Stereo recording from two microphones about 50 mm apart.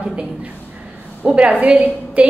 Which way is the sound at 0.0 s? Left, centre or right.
Right.